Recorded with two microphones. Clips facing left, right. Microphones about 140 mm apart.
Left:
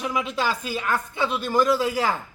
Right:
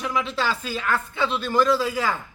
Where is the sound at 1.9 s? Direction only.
30° left (ahead or behind).